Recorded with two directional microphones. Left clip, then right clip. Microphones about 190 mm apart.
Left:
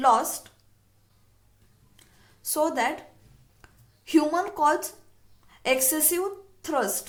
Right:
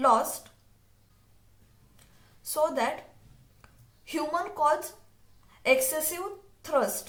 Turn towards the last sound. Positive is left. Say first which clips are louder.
# even
turn(degrees=35)  # may be behind; listen again after turning